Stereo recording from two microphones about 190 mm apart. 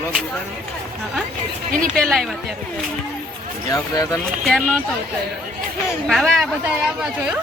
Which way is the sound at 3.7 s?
20° left (ahead or behind).